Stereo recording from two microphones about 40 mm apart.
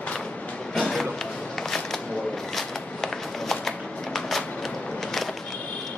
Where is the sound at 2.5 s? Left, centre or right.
Centre.